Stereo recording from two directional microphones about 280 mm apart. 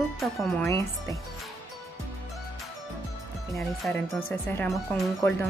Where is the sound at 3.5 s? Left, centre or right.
Centre.